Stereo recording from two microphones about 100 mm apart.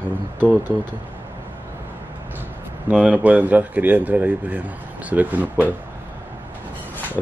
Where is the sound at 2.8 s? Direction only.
15° right (ahead or behind).